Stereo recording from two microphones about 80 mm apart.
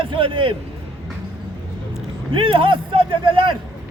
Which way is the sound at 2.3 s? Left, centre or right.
Right.